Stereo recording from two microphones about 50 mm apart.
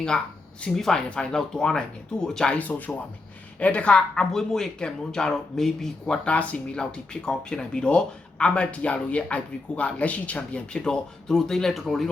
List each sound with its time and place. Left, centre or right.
0.7 s speech: centre
1.1 s speech: centre
2.6 s speech: left; by 6.1 s centre
6.2 s speech: left; by 12.0 s centre